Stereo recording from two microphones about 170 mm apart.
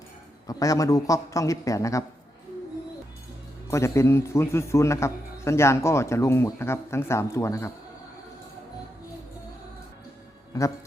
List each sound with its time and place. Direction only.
0.4 s a man's voice: 20° left (ahead or behind)
3.7 s a man's voice: 15° left (ahead or behind)
10.5 s a man's voice: 20° left (ahead or behind)